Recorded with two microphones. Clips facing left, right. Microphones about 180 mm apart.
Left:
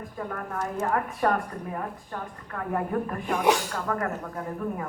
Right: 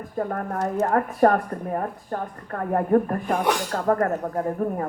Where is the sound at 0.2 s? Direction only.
45° right (ahead or behind).